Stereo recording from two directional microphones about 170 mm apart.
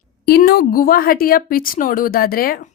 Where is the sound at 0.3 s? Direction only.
65° left (ahead or behind).